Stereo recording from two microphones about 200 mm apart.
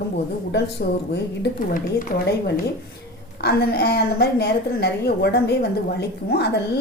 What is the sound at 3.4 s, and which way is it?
A woman's voice, 50° left (ahead or behind).